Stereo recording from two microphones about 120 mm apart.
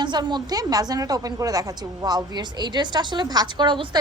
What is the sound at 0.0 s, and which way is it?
A woman's voice, 40° right (ahead or behind).